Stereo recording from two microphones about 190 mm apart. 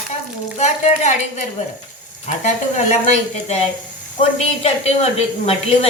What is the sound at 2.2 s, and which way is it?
Speech, 40° left (ahead or behind).